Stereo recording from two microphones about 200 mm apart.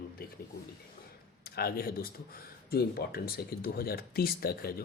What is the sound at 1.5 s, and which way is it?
Speech, 50° left (ahead or behind).